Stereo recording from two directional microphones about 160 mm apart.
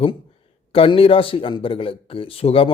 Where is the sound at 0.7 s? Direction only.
35° left (ahead or behind).